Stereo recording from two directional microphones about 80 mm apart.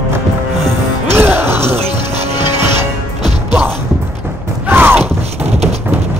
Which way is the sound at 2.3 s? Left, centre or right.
Left.